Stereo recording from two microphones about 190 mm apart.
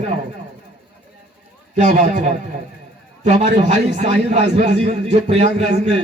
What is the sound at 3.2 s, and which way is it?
A man's voice, 35° right (ahead or behind).